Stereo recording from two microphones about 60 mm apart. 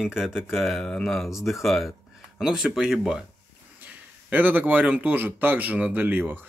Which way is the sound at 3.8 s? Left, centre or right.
Right.